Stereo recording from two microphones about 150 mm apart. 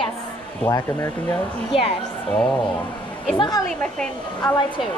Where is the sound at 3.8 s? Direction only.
5° left (ahead or behind).